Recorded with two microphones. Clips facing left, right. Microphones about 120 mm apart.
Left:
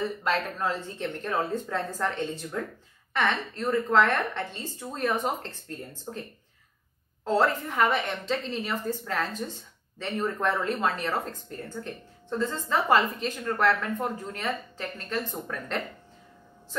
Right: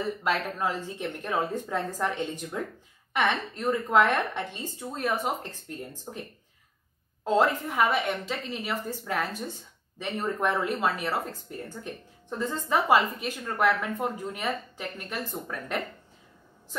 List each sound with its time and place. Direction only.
0.6 s a woman's voice: 10° right (ahead or behind)
7.2 s a woman's voice: 15° right (ahead or behind)